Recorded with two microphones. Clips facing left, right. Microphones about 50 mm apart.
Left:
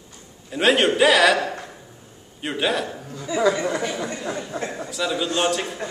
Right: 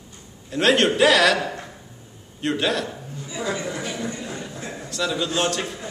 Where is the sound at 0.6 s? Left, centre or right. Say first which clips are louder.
Even; centre.